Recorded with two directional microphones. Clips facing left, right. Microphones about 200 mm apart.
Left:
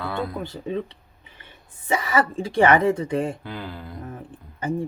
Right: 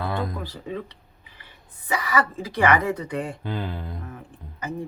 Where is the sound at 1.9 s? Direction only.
25° left (ahead or behind).